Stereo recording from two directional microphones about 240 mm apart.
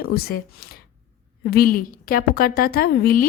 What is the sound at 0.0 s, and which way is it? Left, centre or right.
A woman's voice, left.